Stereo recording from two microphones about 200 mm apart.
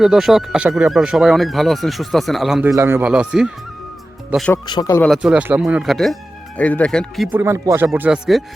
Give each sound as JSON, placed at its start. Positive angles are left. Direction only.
{"t": 0.0, "sound": "speech", "side_deg": 0}
{"t": 2.6, "sound": "speech", "side_deg": -15}
{"t": 4.5, "sound": "speech", "side_deg": 20}
{"t": 5.0, "sound": "speech", "side_deg": 0}
{"t": 7.3, "sound": "speech", "side_deg": -10}